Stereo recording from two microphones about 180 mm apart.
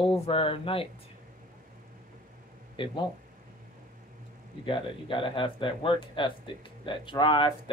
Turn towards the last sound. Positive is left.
turn(degrees=25)  # may be behind; listen again after turning